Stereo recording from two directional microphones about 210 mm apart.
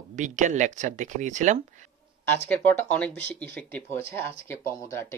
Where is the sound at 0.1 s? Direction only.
35° right (ahead or behind).